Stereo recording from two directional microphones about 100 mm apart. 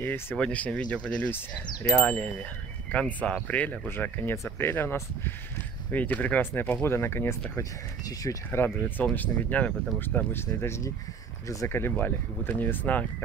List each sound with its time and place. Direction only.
0.0 s speech: 20° left (ahead or behind)
0.4 s speech: 10° left (ahead or behind)